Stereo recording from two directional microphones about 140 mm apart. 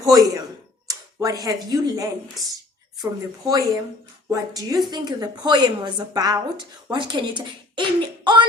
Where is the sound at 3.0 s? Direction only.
25° right (ahead or behind).